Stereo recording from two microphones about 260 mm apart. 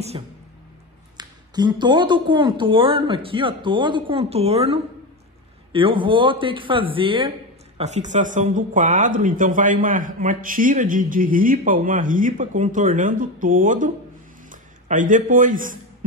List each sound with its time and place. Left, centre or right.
0.1 s a man's voice: centre